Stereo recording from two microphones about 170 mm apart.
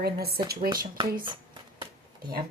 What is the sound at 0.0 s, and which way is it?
Speech, 65° right (ahead or behind).